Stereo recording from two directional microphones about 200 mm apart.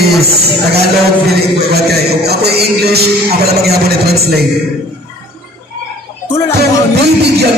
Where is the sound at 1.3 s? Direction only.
55° right (ahead or behind).